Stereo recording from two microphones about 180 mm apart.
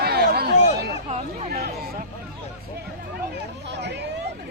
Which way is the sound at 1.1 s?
40° right (ahead or behind).